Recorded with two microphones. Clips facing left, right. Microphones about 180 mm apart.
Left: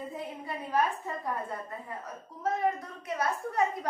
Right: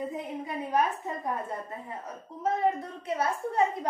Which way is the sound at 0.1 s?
20° right (ahead or behind).